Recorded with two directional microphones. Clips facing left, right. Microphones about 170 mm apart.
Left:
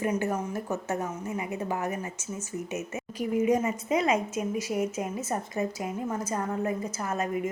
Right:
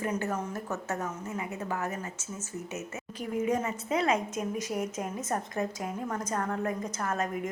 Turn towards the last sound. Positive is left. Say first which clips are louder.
# left 2 dB
turn(degrees=10)  # may be behind; listen again after turning